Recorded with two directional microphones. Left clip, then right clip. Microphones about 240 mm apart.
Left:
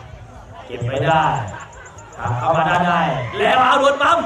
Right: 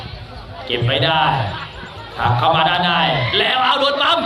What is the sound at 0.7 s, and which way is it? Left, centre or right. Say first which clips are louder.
A man's voice: right 1 dB; right.